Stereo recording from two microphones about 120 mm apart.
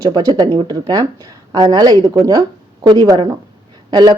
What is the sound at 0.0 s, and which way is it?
Speech, 30° right (ahead or behind).